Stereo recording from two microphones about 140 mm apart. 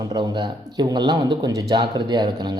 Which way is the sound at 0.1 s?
30° right (ahead or behind).